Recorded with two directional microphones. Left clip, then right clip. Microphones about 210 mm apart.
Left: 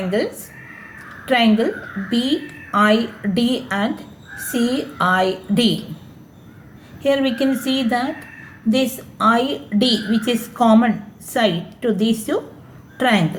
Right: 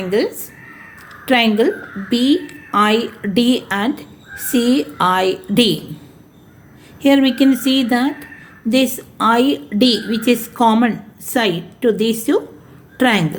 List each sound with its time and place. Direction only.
1.2 s a woman's voice: 45° right (ahead or behind)
7.0 s a woman's voice: 45° right (ahead or behind)